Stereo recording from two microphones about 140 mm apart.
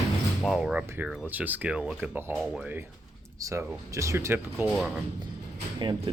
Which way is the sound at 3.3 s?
20° right (ahead or behind).